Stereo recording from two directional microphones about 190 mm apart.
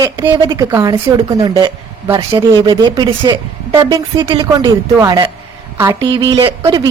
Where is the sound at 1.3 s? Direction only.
25° right (ahead or behind).